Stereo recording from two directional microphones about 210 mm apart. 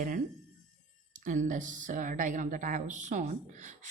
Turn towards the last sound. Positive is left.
turn(degrees=-35)  # may be behind; listen again after turning